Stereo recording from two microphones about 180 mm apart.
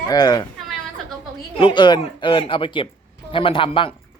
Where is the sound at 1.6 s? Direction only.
25° left (ahead or behind).